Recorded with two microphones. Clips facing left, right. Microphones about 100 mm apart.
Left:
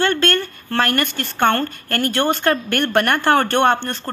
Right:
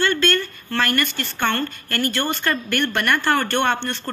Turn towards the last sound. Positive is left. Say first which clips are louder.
# left 4 dB
turn(degrees=45)  # may be behind; listen again after turning